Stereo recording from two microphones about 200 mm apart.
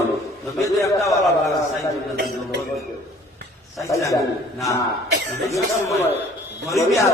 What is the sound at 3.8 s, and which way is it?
A man's voice, 15° left (ahead or behind).